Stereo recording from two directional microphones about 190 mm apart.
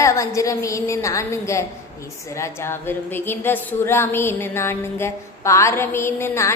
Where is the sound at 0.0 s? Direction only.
15° left (ahead or behind).